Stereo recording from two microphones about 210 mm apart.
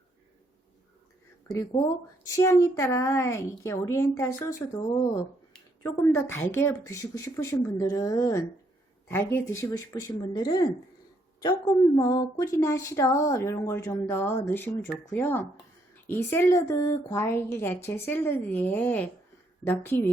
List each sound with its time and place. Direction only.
2.3 s a woman's voice: 15° left (ahead or behind)
11.9 s a woman's voice: 15° left (ahead or behind)